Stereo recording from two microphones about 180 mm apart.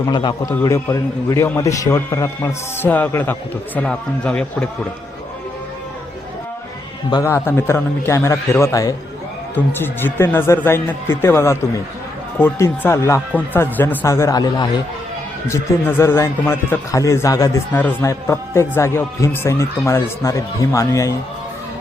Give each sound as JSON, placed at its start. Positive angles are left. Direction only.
{"t": 0.0, "sound": "a man's voice", "side_deg": 25}
{"t": 7.1, "sound": "speech", "side_deg": 15}